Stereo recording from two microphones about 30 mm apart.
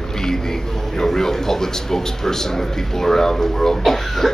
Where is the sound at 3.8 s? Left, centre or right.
Centre.